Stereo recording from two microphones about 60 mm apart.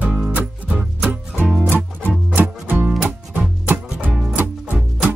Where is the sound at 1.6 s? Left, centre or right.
Right.